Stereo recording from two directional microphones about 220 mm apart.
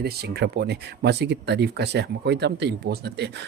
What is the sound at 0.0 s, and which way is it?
Speech, 45° right (ahead or behind).